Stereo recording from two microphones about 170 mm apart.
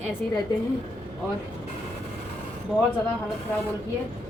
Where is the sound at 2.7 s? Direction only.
5° left (ahead or behind).